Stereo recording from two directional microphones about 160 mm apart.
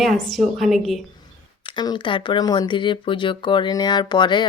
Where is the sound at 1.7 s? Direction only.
30° left (ahead or behind).